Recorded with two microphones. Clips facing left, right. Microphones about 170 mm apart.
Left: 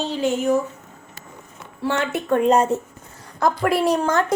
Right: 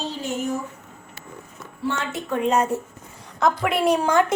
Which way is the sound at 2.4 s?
35° left (ahead or behind).